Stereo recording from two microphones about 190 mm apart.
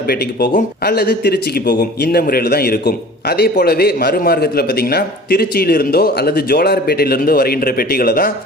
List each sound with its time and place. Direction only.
0.1 s speech: 55° left (ahead or behind)